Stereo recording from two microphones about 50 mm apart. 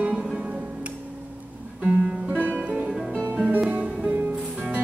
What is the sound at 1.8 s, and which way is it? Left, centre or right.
Music, right.